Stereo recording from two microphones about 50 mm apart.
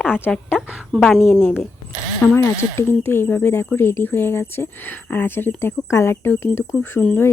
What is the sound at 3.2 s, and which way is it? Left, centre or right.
Speech, left.